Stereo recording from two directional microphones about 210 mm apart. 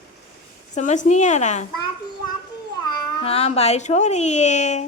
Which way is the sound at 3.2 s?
30° left (ahead or behind).